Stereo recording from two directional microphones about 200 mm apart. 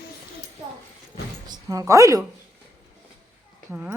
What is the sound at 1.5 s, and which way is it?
Speech, 15° right (ahead or behind).